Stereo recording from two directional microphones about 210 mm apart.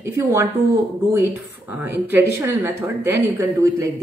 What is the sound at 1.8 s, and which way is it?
Speech, 10° right (ahead or behind).